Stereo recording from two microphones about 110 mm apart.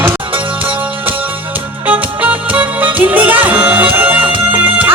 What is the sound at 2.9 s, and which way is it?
Music, 15° right (ahead or behind).